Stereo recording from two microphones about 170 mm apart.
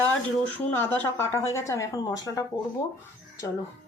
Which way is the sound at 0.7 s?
10° left (ahead or behind).